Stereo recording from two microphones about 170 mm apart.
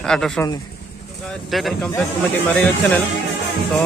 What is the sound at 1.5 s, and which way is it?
Speech, centre (ahead or behind).